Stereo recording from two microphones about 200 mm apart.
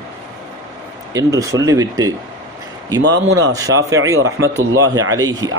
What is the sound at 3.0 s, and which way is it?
Speech, 60° right (ahead or behind).